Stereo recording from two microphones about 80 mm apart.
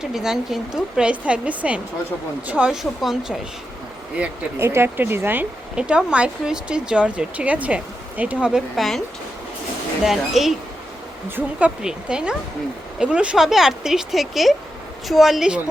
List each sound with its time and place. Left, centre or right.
0.0 s speech: centre
3.0 s speech: centre
4.5 s speech: right
5.7 s speech: centre
8.4 s speech: centre
10.0 s speech: centre
11.8 s speech: centre